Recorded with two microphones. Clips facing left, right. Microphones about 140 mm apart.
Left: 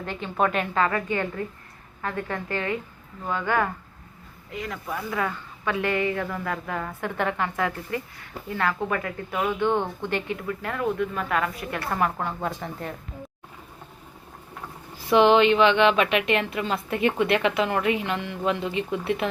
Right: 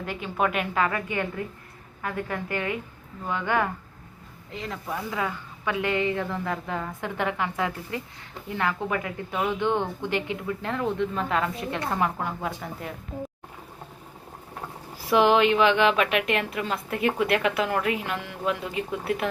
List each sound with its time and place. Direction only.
0.0 s speech: 10° right (ahead or behind)
4.5 s a woman's voice: 30° right (ahead or behind)
4.9 s a woman's voice: 15° right (ahead or behind)
15.1 s a woman's voice: 5° right (ahead or behind)